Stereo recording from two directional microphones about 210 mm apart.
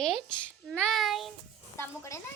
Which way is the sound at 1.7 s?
15° left (ahead or behind).